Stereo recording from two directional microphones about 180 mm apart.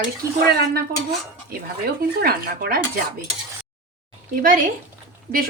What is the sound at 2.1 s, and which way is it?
Speech, 55° right (ahead or behind).